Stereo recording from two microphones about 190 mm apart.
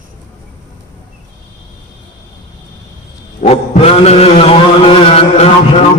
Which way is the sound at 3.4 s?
35° left (ahead or behind).